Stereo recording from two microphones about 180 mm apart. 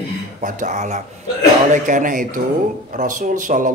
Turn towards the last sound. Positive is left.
turn(degrees=-45)  # may be behind; listen again after turning